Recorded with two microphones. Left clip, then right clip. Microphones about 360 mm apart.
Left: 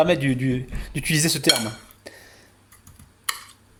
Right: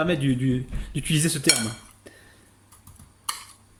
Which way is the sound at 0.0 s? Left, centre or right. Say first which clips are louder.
Left 5 dB; centre.